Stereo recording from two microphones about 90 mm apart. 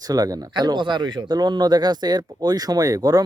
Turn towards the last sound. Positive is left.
turn(degrees=-45)  # may be behind; listen again after turning